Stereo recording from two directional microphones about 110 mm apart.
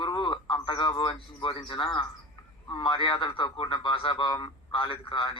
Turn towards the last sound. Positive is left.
turn(degrees=50)  # may be behind; listen again after turning